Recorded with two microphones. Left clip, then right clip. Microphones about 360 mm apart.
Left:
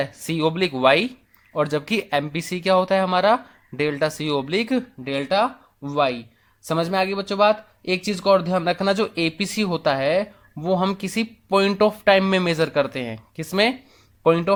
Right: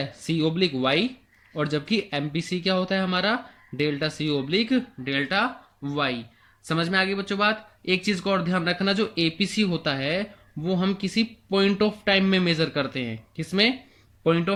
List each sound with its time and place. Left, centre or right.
0.0 s speech: centre